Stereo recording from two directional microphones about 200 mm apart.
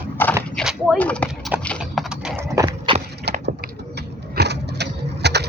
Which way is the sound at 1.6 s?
Centre (ahead or behind).